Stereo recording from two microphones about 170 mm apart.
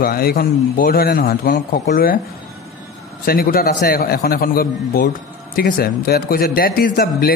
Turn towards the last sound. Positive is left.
turn(degrees=60)  # may be behind; listen again after turning